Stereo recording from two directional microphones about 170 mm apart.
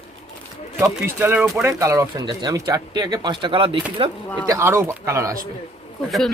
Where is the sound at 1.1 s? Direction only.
10° right (ahead or behind); by 4.1 s 30° right (ahead or behind).